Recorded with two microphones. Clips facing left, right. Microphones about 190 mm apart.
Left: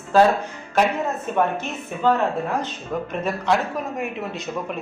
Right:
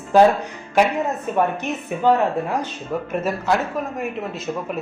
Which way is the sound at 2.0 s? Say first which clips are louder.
Right 2 dB; 15° right (ahead or behind).